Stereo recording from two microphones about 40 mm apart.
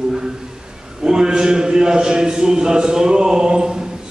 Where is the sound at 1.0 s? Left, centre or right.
Centre.